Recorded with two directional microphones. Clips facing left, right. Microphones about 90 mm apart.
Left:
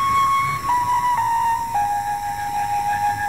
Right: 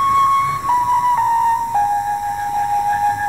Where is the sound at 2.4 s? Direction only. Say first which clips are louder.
Right 4 dB; 30° right (ahead or behind).